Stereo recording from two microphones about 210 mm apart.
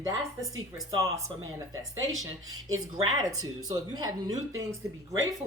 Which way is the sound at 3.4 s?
20° right (ahead or behind).